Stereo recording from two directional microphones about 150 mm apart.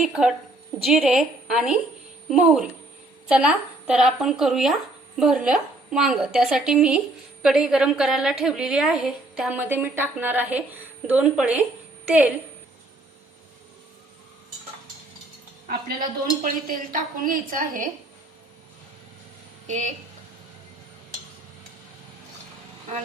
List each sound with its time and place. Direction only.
0.0 s a woman's voice: 5° right (ahead or behind)
15.6 s a woman's voice: 75° right (ahead or behind)
19.6 s speech: 55° right (ahead or behind)